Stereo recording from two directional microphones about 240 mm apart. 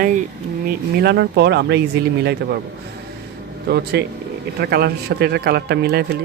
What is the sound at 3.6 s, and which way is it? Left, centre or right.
A man's voice, right.